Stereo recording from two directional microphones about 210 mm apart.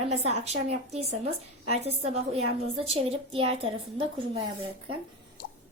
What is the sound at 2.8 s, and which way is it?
Speech, 25° right (ahead or behind).